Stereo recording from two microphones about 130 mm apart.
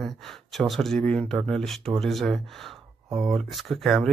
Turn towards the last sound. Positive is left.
turn(degrees=0)  # may be behind; listen again after turning